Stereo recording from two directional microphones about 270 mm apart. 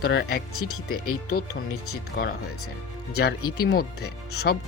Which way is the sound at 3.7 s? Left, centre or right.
Left.